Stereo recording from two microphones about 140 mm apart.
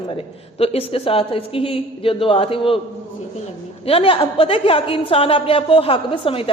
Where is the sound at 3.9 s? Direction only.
40° left (ahead or behind).